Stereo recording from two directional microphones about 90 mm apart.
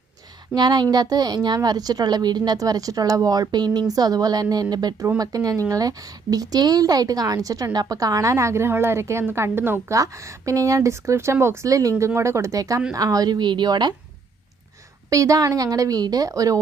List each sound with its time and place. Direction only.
0.5 s a woman's voice: 50° right (ahead or behind); by 9.8 s 25° right (ahead or behind)
9.9 s a woman's voice: 35° right (ahead or behind); by 13.9 s 55° right (ahead or behind)
15.1 s a woman's voice: 40° right (ahead or behind)